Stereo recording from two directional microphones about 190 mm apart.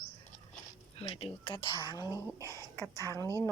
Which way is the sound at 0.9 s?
30° left (ahead or behind).